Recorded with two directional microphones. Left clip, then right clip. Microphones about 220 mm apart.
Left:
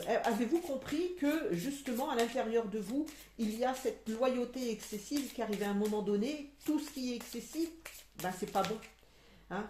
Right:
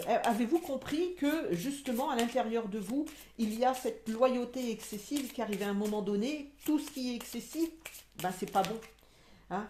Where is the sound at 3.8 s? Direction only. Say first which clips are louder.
Right 4 dB; 40° right (ahead or behind).